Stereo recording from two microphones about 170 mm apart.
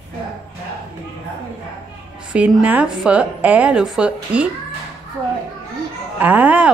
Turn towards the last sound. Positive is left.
turn(degrees=-10)  # may be behind; listen again after turning